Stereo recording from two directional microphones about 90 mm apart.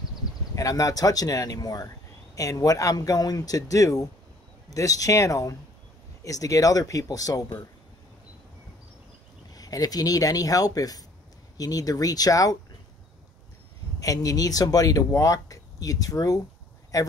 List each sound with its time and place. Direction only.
0.6 s speech: 40° left (ahead or behind)
9.6 s speech: 45° left (ahead or behind)
13.9 s speech: 40° left (ahead or behind)